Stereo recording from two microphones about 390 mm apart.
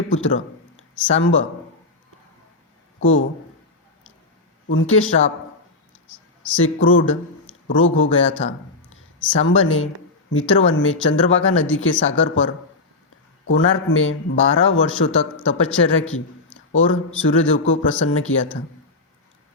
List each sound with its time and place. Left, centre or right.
0.1 s speech: left
3.0 s a man's voice: left
4.7 s a man's voice: left
13.5 s a man's voice: left